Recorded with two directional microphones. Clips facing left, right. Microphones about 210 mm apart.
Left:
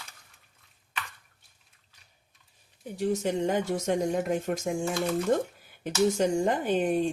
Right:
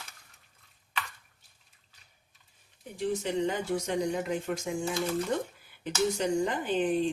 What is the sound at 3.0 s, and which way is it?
Speech, 45° left (ahead or behind).